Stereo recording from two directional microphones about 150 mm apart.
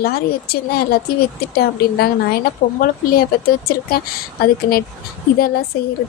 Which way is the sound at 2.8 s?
80° left.